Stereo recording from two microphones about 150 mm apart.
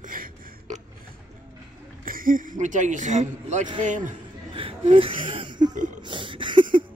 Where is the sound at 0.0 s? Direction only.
65° right (ahead or behind).